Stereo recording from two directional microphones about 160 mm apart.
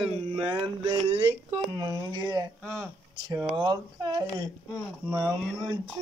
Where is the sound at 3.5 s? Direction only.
25° right (ahead or behind).